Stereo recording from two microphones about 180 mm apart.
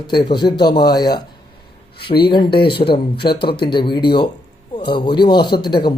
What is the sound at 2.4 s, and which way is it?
Speech, 60° left (ahead or behind).